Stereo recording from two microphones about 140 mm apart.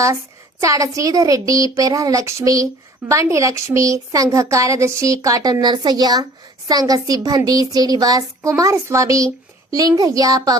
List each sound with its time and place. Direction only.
0.6 s a woman's voice: 25° right (ahead or behind)